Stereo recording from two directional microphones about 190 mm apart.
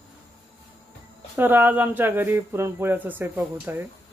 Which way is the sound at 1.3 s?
10° right (ahead or behind).